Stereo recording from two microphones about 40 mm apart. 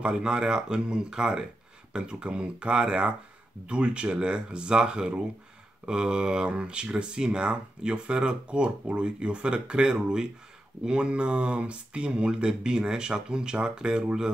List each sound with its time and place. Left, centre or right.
0.1 s speech: centre